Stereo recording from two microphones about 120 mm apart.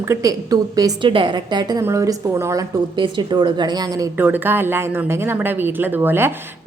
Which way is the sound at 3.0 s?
40° right (ahead or behind).